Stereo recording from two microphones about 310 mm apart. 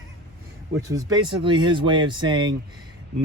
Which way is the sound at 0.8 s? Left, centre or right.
Centre.